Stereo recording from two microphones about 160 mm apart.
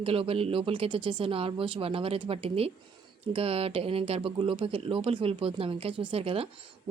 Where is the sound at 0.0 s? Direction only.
35° right (ahead or behind).